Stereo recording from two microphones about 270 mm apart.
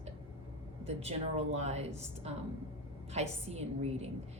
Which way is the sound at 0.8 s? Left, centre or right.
Right.